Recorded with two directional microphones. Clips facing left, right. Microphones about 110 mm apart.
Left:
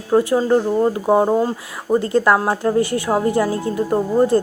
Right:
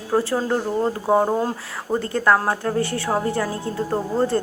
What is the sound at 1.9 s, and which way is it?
A woman's voice, 20° left (ahead or behind).